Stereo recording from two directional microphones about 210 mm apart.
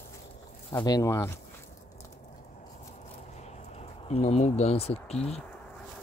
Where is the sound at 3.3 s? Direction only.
30° left (ahead or behind).